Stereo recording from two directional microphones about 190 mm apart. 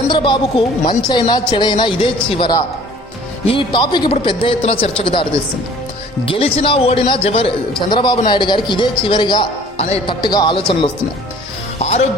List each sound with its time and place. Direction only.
0.1 s speech: 25° left (ahead or behind)
6.2 s speech: 30° left (ahead or behind)
11.8 s speech: 35° left (ahead or behind)